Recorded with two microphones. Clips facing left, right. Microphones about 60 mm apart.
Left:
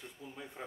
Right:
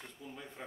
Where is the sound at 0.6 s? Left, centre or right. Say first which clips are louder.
Left 1 dB; centre.